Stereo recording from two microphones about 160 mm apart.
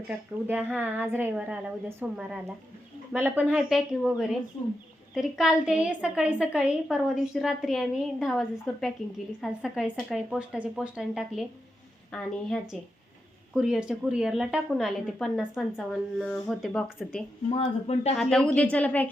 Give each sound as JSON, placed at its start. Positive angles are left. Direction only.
{"t": 0.1, "sound": "a woman's voice", "side_deg": -10}
{"t": 3.7, "sound": "a woman's voice", "side_deg": 0}
{"t": 17.5, "sound": "speech", "side_deg": 40}
{"t": 18.2, "sound": "a woman's voice", "side_deg": 5}